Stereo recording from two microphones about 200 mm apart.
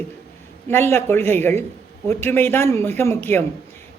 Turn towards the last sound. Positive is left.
turn(degrees=10)  # may be behind; listen again after turning